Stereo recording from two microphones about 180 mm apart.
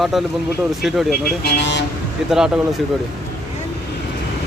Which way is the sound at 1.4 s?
70° left (ahead or behind).